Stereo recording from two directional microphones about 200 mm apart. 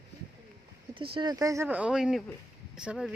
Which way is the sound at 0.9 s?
25° right (ahead or behind).